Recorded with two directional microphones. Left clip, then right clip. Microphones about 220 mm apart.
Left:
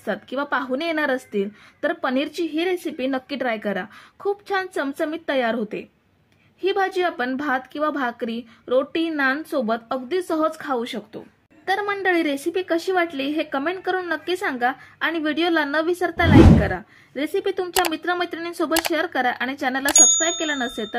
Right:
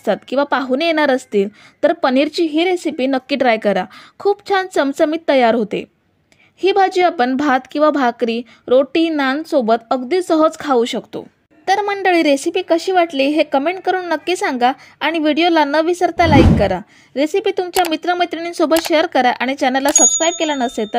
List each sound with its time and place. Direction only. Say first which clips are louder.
0.0 s a woman's voice: right 9 dB; 35° right (ahead or behind)
16.3 s speech: left 1 dB; centre (ahead or behind)
16.6 s a woman's voice: right 8 dB; 35° right (ahead or behind)